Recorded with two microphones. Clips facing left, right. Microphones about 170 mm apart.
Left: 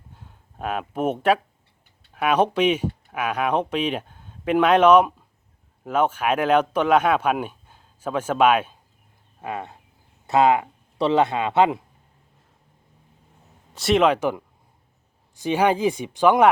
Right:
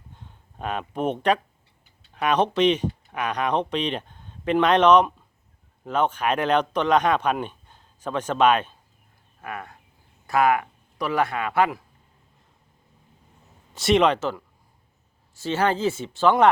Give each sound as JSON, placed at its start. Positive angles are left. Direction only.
{"t": 0.1, "sound": "a sound", "side_deg": 5}
{"t": 2.1, "sound": "speech", "side_deg": 5}
{"t": 9.4, "sound": "speech", "side_deg": 25}
{"t": 13.7, "sound": "speech", "side_deg": 0}